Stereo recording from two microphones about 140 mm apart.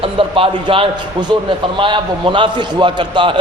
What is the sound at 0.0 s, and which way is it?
A man's voice, 40° right (ahead or behind).